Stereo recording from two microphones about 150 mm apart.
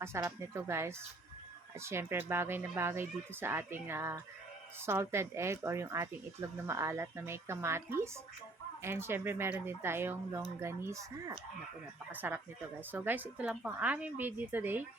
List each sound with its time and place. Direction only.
0.0 s speech: 20° right (ahead or behind)
12.1 s speech: 10° right (ahead or behind)